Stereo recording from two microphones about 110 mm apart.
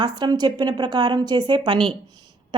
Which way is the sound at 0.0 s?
40° right (ahead or behind).